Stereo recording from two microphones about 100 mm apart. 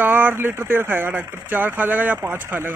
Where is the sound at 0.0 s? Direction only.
20° right (ahead or behind).